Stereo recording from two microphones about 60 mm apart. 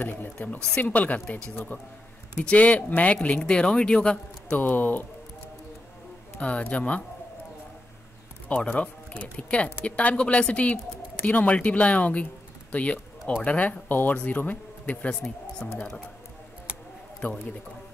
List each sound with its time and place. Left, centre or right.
0.0 s speech: left
2.3 s speech: left
4.5 s speech: left
6.6 s speech: left
8.5 s speech: left
17.2 s speech: left